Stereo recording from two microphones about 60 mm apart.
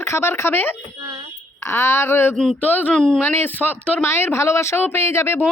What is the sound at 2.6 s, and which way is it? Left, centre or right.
Speech, left.